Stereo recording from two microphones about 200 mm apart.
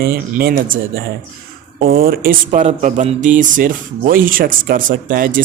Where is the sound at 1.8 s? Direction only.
50° right (ahead or behind).